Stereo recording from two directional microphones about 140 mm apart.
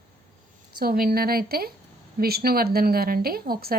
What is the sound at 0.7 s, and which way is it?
A woman's voice, 90° right.